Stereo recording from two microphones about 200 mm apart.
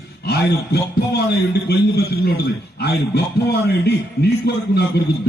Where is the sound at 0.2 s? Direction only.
55° left (ahead or behind).